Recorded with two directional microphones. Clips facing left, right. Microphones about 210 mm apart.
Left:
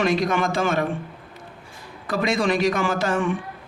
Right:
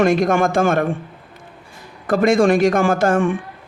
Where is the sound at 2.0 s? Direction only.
50° right (ahead or behind).